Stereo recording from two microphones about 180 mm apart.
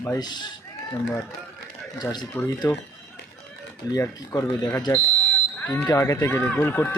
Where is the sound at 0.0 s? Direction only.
20° left (ahead or behind).